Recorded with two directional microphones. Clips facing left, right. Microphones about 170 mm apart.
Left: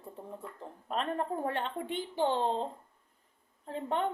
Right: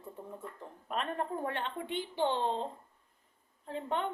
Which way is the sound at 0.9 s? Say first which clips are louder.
Left 2 dB; 35° left (ahead or behind).